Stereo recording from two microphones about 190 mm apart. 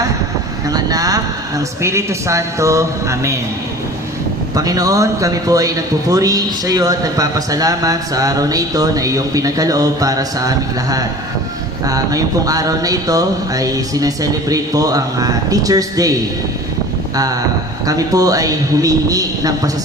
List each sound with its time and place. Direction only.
0.7 s a man's voice: 20° right (ahead or behind)
4.5 s a man's voice: 20° right (ahead or behind)
17.8 s a man's voice: 20° right (ahead or behind)